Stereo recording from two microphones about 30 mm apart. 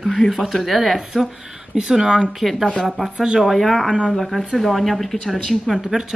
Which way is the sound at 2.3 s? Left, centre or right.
Centre.